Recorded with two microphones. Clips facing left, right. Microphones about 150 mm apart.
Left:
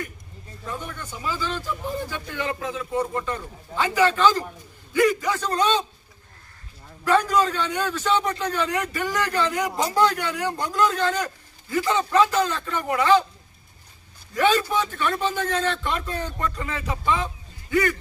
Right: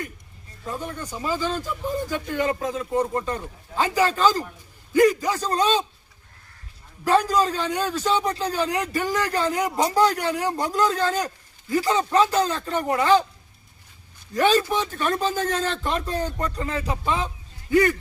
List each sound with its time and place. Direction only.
0.6 s a man's voice: 35° right (ahead or behind)
7.1 s a man's voice: 35° right (ahead or behind)
14.9 s a man's voice: 40° right (ahead or behind)